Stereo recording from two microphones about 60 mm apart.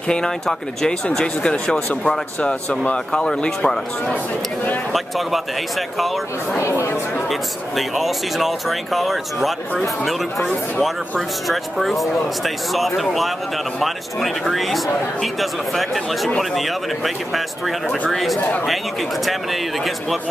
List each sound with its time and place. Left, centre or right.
0.1 s speech: centre
4.9 s speech: centre
6.8 s speech: left
7.2 s speech: centre